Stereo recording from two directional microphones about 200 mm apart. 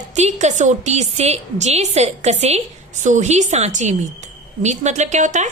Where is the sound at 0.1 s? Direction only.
35° right (ahead or behind).